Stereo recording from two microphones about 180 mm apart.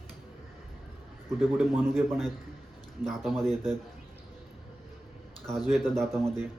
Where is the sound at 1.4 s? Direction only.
5° right (ahead or behind).